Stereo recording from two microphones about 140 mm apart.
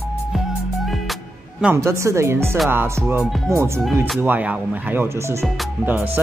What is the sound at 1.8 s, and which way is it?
Speech, 20° right (ahead or behind).